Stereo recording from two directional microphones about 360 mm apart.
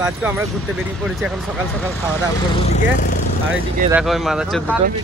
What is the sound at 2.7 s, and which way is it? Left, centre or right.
Speech, left.